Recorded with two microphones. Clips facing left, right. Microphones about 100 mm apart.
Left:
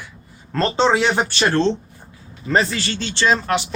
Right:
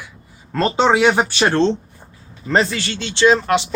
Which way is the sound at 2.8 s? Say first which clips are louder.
Right 4 dB; 20° right (ahead or behind).